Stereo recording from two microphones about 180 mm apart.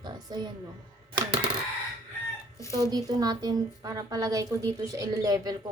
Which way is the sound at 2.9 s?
20° right (ahead or behind).